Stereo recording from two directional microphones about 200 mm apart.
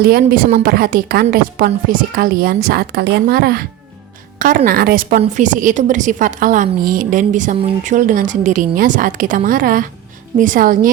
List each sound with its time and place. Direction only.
0.0 s a woman's voice: 50° right (ahead or behind)